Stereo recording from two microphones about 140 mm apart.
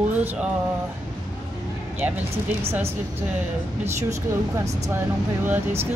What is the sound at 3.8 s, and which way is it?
Speech, 20° right (ahead or behind).